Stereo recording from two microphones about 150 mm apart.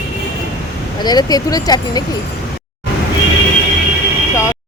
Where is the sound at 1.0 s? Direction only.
25° left (ahead or behind).